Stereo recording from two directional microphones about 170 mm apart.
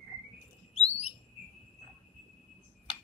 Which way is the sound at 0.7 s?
40° left (ahead or behind).